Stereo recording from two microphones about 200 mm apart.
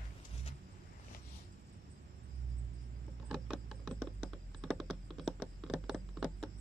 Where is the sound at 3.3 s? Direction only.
Centre (ahead or behind).